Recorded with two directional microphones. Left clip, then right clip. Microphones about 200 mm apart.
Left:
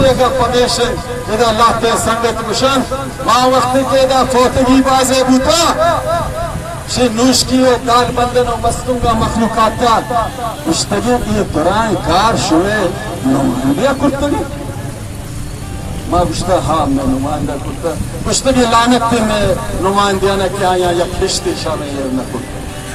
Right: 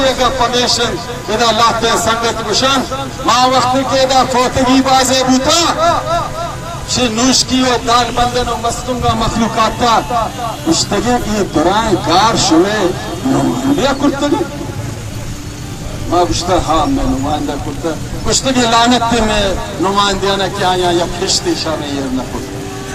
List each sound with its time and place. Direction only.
0.0 s a man's voice: 30° left (ahead or behind)
16.1 s a man's voice: 30° left (ahead or behind)
18.3 s a man's voice: 35° left (ahead or behind)